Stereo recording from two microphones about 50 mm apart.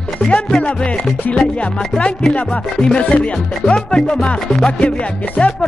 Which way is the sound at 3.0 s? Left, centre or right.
Left.